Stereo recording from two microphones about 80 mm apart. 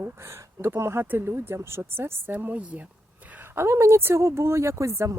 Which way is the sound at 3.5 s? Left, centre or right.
Right.